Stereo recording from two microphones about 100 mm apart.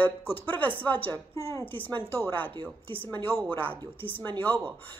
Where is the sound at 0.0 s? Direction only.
20° left (ahead or behind).